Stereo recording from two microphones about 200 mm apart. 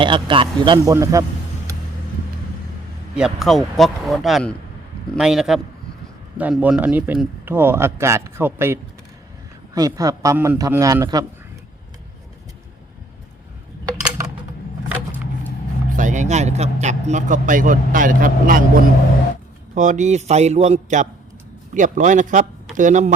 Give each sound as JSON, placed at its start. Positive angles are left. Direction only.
{"t": 0.0, "sound": "a man's voice", "side_deg": -25}
{"t": 3.2, "sound": "speech", "side_deg": 0}
{"t": 16.0, "sound": "speech", "side_deg": -40}